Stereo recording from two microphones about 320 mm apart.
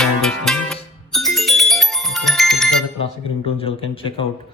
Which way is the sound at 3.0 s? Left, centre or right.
Centre.